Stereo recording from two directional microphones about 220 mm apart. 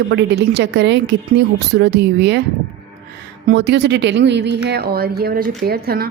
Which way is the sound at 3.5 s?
50° right (ahead or behind).